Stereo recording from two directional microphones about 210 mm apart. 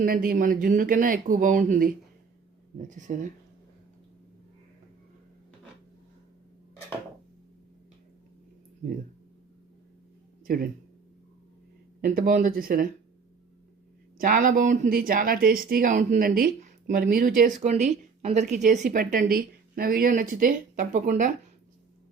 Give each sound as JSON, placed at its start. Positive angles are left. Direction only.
{"t": 0.0, "sound": "speech", "side_deg": -45}
{"t": 10.4, "sound": "speech", "side_deg": -45}
{"t": 12.0, "sound": "speech", "side_deg": -40}
{"t": 14.2, "sound": "speech", "side_deg": -40}